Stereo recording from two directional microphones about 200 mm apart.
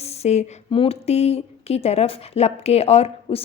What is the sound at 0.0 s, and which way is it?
Speech, 35° left (ahead or behind).